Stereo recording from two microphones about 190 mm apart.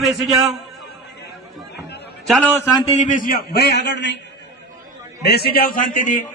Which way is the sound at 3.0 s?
45° left (ahead or behind).